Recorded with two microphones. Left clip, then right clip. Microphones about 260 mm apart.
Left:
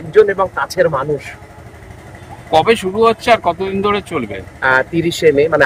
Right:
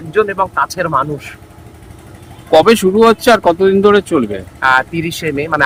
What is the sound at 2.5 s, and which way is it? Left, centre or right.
Speech, right.